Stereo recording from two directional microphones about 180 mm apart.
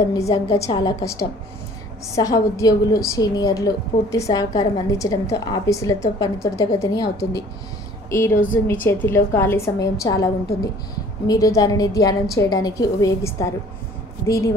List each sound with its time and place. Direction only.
0.3 s a woman's voice: 20° left (ahead or behind)